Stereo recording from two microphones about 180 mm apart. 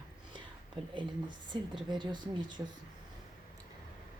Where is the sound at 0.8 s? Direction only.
30° right (ahead or behind).